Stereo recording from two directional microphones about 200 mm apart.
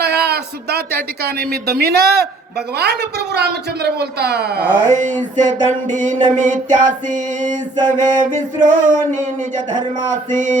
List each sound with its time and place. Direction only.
0.0 s speech: 55° right (ahead or behind)
4.9 s music: 40° right (ahead or behind)
10.3 s music: 40° right (ahead or behind)